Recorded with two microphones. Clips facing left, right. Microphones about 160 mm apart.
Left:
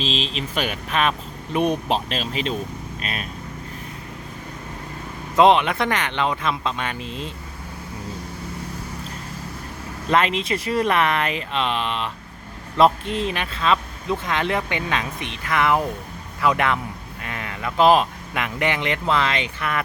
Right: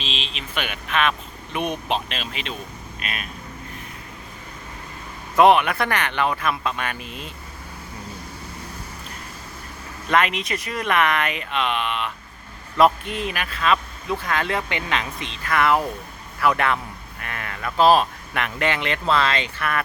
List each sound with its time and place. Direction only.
0.0 s speech: 40° left (ahead or behind)
5.4 s speech: 20° left (ahead or behind)
10.1 s speech: 30° left (ahead or behind)